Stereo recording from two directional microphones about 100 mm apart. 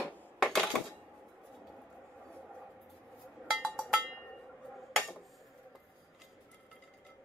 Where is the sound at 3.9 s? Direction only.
5° left (ahead or behind).